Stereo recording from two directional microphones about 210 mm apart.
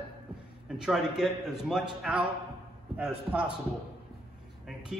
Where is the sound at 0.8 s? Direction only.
Centre (ahead or behind).